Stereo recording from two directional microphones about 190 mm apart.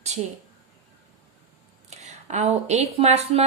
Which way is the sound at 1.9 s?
35° right (ahead or behind).